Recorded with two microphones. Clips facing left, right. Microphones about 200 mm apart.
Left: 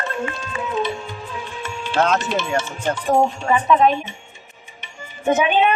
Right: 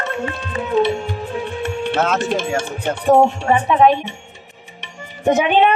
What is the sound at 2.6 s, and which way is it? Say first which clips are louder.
Music: right 2 dB; 55° right (ahead or behind).